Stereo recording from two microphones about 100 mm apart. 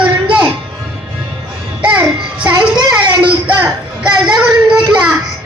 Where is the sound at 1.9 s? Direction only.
15° right (ahead or behind).